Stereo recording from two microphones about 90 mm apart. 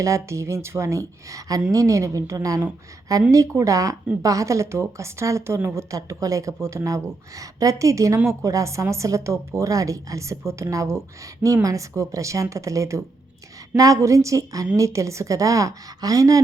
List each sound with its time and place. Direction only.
0.0 s a woman's voice: 35° right (ahead or behind)